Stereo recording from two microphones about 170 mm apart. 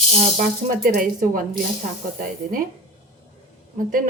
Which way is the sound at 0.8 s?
55° right (ahead or behind).